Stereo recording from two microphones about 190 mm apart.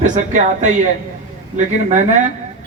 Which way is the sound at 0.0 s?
40° right (ahead or behind).